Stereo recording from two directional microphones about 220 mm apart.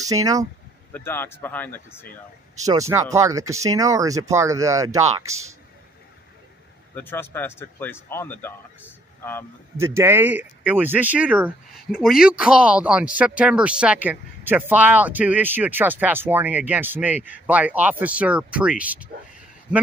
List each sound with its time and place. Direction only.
0.0 s speech: 15° right (ahead or behind)
0.9 s speech: 10° left (ahead or behind)
2.6 s speech: 15° right (ahead or behind)
7.0 s speech: 10° left (ahead or behind)
9.8 s a man's voice: 10° right (ahead or behind)